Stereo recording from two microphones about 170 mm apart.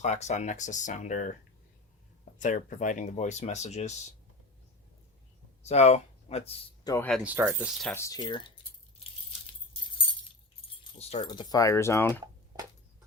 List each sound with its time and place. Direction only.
0.0 s speech: 40° left (ahead or behind)
2.4 s speech: 50° left (ahead or behind)
5.6 s speech: 40° left (ahead or behind)
6.8 s speech: 15° left (ahead or behind)
7.4 s speech: centre (ahead or behind)
7.9 s speech: 20° left (ahead or behind)
10.9 s speech: 40° left (ahead or behind)
11.3 s speech: 25° left (ahead or behind)